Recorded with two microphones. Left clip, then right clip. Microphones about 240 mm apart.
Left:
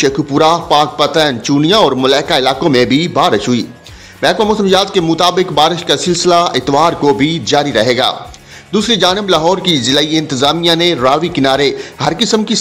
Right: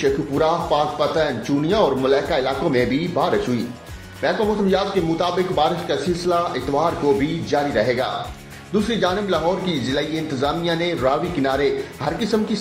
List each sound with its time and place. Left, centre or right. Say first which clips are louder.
0.0 s a man's voice: left 8 dB; left